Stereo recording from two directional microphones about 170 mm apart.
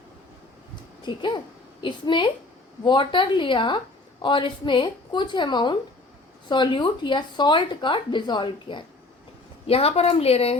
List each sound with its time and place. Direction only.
1.0 s a woman's voice: 25° left (ahead or behind)